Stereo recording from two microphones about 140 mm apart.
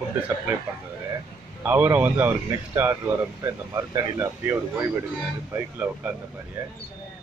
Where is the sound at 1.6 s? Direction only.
15° right (ahead or behind).